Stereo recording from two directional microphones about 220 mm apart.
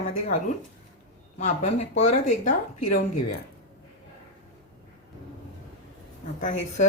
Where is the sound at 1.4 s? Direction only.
35° left (ahead or behind).